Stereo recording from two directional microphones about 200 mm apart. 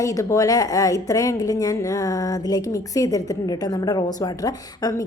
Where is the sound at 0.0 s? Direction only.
15° left (ahead or behind).